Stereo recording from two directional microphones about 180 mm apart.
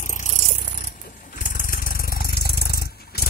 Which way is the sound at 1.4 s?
50° left (ahead or behind).